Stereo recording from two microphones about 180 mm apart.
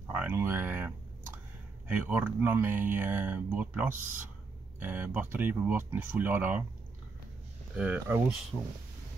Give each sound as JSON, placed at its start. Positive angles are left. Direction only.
{"t": 0.1, "sound": "speech", "side_deg": -10}
{"t": 7.7, "sound": "speech", "side_deg": -10}